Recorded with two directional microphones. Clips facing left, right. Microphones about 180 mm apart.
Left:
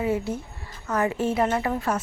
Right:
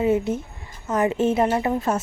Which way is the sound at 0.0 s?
25° right (ahead or behind).